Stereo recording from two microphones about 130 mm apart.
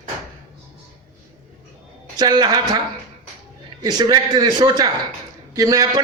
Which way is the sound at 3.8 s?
35° right (ahead or behind).